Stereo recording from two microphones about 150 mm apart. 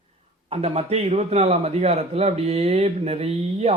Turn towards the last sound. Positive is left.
turn(degrees=-45)  # may be behind; listen again after turning